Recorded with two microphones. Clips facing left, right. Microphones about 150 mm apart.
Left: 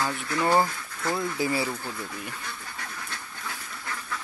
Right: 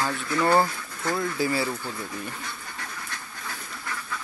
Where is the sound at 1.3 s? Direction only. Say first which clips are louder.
Right 2 dB; 20° left (ahead or behind).